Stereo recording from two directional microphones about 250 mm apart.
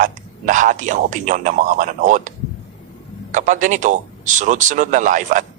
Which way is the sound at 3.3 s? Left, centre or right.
Right.